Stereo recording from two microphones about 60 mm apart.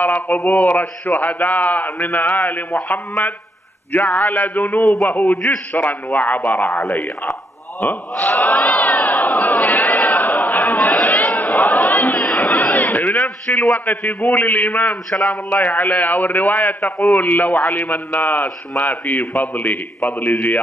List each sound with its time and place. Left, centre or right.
0.0 s a man's voice: left
7.8 s speech: left
8.4 s crowd: left
11.6 s chatter: left
13.1 s a man's voice: left
15.0 s a man's voice: centre
15.5 s a man's voice: left